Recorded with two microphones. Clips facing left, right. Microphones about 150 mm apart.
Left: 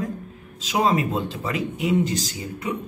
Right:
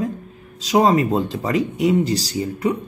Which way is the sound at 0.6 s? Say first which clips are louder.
Right 6 dB; 40° right (ahead or behind).